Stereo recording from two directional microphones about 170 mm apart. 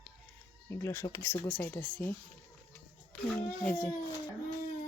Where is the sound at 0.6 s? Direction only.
15° left (ahead or behind).